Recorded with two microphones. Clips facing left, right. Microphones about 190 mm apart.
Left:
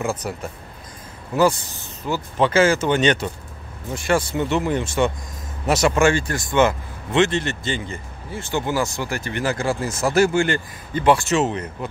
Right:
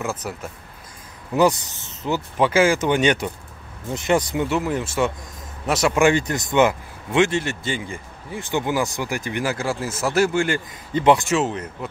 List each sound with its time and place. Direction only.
0.0 s speech: centre (ahead or behind)
1.3 s speech: 20° right (ahead or behind)
4.5 s speech: 5° right (ahead or behind)
5.9 s speech: 15° right (ahead or behind)
10.9 s speech: 20° right (ahead or behind)
11.3 s speech: centre (ahead or behind)